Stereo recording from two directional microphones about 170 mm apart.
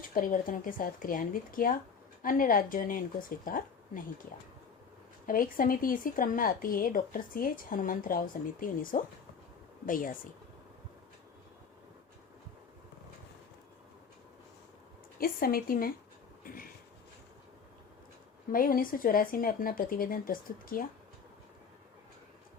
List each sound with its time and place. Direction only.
0.1 s speech: 55° left (ahead or behind)
5.2 s speech: 55° left (ahead or behind)
15.2 s speech: 60° left (ahead or behind)
16.4 s a sound: 55° left (ahead or behind)
18.5 s speech: 55° left (ahead or behind)